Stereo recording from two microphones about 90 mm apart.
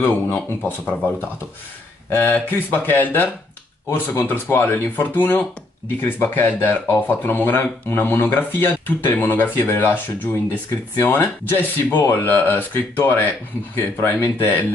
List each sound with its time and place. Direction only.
0.0 s speech: 20° left (ahead or behind)